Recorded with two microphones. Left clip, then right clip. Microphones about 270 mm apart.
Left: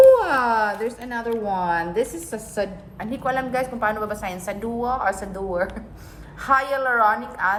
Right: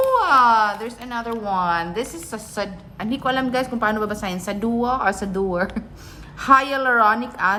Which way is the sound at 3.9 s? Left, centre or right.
Right.